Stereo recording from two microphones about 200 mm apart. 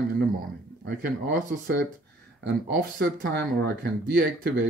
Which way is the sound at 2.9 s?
60° right (ahead or behind).